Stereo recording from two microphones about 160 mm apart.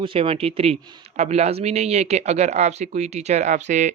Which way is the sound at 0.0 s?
35° right (ahead or behind).